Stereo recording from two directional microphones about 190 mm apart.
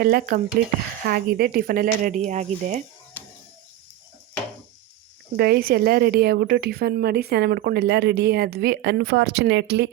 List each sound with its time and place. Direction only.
0.0 s speech: 50° right (ahead or behind)
5.4 s speech: 55° right (ahead or behind)